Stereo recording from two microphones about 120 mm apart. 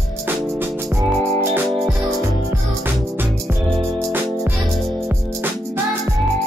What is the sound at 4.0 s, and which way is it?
Music, 20° right (ahead or behind).